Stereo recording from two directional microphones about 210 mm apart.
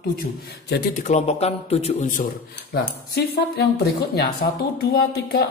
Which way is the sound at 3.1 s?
50° left (ahead or behind).